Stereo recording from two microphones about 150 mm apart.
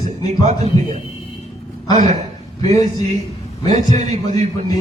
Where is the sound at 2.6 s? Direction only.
50° right (ahead or behind).